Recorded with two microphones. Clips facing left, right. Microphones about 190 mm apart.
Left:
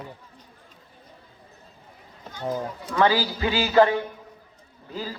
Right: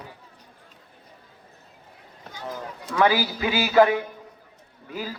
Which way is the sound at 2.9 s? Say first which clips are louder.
Even; 10° right (ahead or behind).